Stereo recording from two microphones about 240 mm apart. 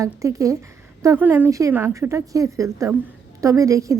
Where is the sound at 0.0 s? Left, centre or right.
Centre.